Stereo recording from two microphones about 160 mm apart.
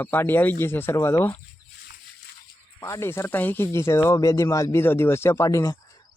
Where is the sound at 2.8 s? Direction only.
15° left (ahead or behind).